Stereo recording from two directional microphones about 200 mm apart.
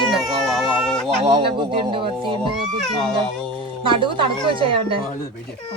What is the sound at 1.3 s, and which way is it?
Speech, 25° right (ahead or behind).